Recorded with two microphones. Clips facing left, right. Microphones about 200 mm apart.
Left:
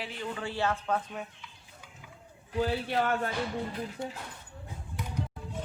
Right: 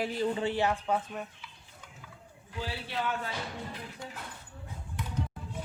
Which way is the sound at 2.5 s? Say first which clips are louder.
Left 8 dB; 45° left (ahead or behind).